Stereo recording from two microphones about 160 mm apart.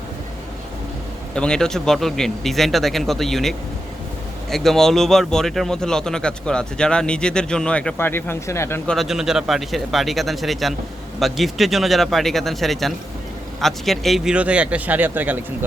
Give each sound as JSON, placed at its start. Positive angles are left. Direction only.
{"t": 1.4, "sound": "speech", "side_deg": 5}
{"t": 8.9, "sound": "a man's voice", "side_deg": 0}